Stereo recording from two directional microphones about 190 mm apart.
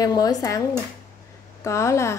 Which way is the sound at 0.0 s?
20° left (ahead or behind).